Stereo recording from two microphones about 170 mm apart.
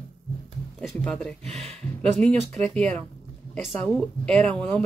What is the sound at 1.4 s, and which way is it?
Speech, 40° right (ahead or behind).